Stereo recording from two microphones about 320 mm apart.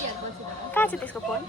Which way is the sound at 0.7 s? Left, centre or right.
Centre.